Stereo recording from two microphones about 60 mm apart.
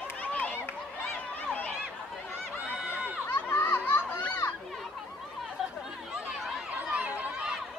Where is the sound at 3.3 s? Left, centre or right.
Left.